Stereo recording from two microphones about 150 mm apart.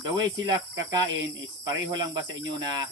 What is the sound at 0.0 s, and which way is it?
Cricket, 30° right (ahead or behind).